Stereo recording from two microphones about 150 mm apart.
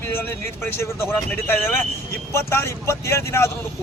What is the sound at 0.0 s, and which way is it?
Speech, 15° left (ahead or behind).